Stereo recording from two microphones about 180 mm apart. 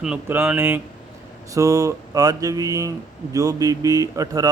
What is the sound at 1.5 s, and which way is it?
Speech, 20° right (ahead or behind).